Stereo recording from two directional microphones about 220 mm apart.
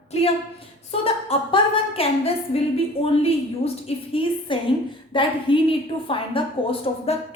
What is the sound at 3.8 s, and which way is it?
A woman's voice, 25° left (ahead or behind).